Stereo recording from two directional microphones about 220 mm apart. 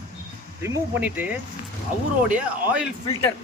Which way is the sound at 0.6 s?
10° right (ahead or behind).